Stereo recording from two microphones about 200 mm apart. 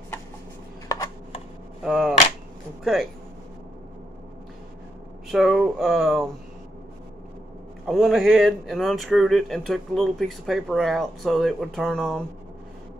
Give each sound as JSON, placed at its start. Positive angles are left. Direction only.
{"t": 0.8, "sound": "a sound", "side_deg": 15}
{"t": 1.8, "sound": "speech", "side_deg": -5}
{"t": 5.3, "sound": "speech", "side_deg": 0}
{"t": 7.8, "sound": "speech", "side_deg": 0}